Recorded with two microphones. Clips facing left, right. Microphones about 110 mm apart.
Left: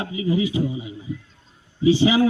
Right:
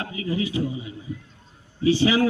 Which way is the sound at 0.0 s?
20° left (ahead or behind).